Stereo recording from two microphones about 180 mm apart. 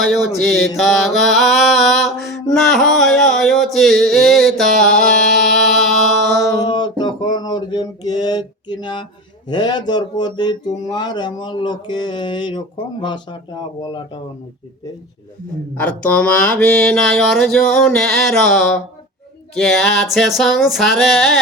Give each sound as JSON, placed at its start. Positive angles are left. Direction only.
{"t": 0.0, "sound": "mantra", "side_deg": 0}
{"t": 6.7, "sound": "a sound", "side_deg": 25}
{"t": 9.5, "sound": "speech", "side_deg": 25}
{"t": 15.8, "sound": "mantra", "side_deg": 5}